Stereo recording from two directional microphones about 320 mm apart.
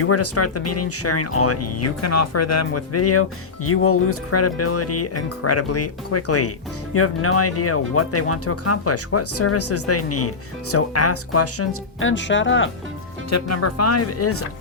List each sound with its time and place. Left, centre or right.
0.0 s speech: left
13.3 s speech: left